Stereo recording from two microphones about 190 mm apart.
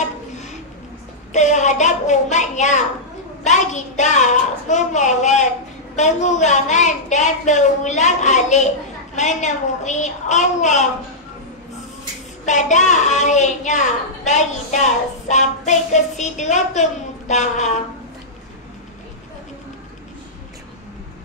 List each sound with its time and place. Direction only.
1.3 s a child's voice: 40° left (ahead or behind)
12.4 s a child's voice: 40° left (ahead or behind)